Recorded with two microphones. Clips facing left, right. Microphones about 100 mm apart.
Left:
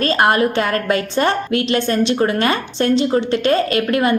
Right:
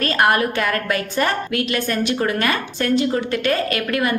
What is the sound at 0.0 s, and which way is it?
A woman's voice, 25° left (ahead or behind).